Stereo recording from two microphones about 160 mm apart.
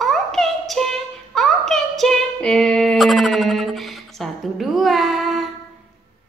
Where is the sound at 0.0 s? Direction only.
Centre (ahead or behind).